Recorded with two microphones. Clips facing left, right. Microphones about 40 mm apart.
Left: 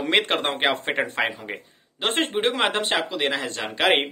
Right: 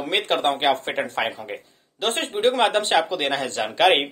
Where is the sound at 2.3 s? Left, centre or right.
Centre.